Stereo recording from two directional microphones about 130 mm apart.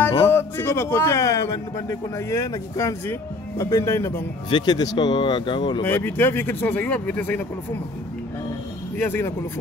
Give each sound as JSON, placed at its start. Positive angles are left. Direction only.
{"t": 0.1, "sound": "a man's voice", "side_deg": 20}
{"t": 4.5, "sound": "speech", "side_deg": 35}
{"t": 5.9, "sound": "speech", "side_deg": 15}
{"t": 8.9, "sound": "speech", "side_deg": 15}